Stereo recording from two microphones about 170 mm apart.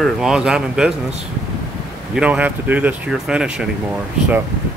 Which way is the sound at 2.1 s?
5° right (ahead or behind).